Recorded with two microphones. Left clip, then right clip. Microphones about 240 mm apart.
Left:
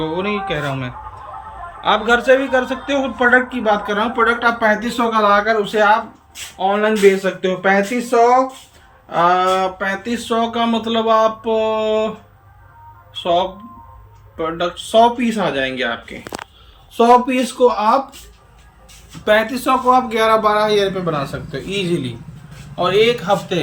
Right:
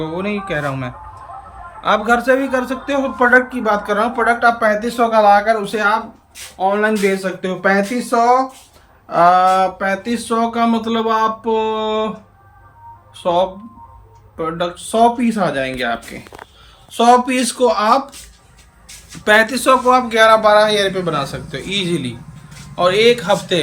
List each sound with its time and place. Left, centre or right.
0.0 s a man's voice: centre
9.5 s a man's voice: centre
14.3 s a man's voice: centre
17.0 s speech: centre
19.2 s a man's voice: centre